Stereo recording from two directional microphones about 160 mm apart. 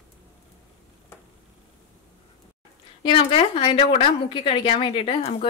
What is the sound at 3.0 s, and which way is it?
A woman's voice, 35° left (ahead or behind).